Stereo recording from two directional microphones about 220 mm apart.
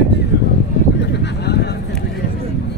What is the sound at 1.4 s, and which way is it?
Vehicle, 50° left (ahead or behind).